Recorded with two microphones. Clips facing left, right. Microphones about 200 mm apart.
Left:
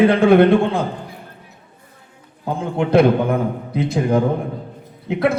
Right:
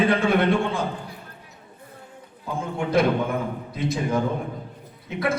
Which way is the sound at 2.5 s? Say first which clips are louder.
Left 7 dB; 65° left (ahead or behind).